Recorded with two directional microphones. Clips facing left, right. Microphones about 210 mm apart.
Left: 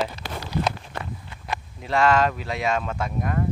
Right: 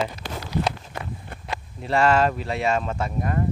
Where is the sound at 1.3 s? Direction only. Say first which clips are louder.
Right 5 dB; 55° right (ahead or behind).